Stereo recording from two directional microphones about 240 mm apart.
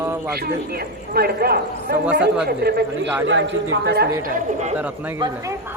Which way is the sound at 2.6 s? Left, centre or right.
Right.